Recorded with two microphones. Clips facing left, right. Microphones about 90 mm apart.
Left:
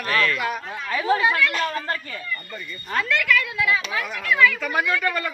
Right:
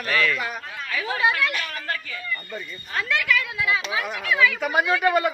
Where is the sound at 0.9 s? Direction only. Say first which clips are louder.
Left 6 dB; 35° left (ahead or behind).